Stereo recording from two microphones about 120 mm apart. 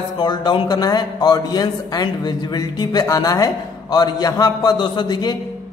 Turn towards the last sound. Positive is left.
turn(degrees=40)  # may be behind; listen again after turning